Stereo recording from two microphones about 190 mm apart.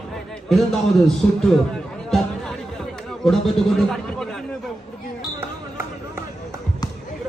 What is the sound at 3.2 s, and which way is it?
A man's voice, centre (ahead or behind).